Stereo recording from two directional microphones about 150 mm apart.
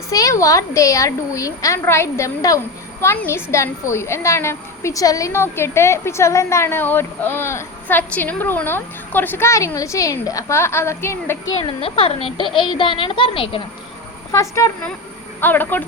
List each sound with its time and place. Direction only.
0.1 s a woman's voice: 20° left (ahead or behind)
11.8 s a child's voice: 40° left (ahead or behind)
14.3 s a woman's voice: 20° left (ahead or behind)